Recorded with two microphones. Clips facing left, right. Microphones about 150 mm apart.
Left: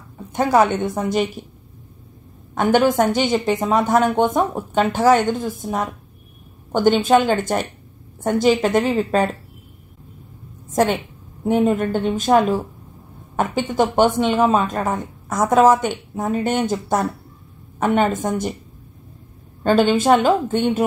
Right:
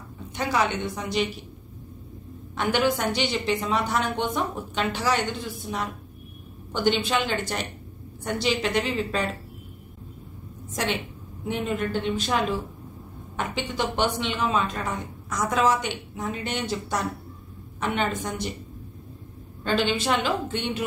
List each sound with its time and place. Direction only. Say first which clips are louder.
0.3 s a woman's voice: left 9 dB; 50° left (ahead or behind)
2.5 s a woman's voice: left 8 dB; 45° left (ahead or behind)
10.7 s a woman's voice: left 10 dB; 50° left (ahead or behind)
19.6 s a woman's voice: left 9 dB; 45° left (ahead or behind)